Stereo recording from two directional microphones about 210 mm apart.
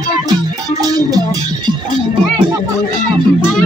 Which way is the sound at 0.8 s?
20° right (ahead or behind).